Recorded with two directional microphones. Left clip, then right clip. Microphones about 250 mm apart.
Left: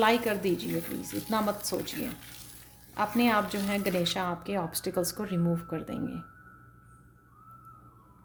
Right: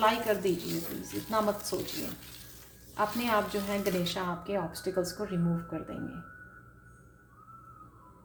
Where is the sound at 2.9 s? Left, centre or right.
Left.